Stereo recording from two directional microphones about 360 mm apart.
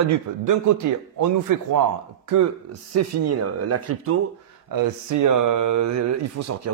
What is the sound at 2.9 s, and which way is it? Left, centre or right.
Speech, right.